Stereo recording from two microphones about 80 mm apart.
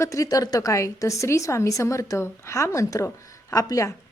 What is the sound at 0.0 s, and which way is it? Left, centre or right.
A woman's voice, left.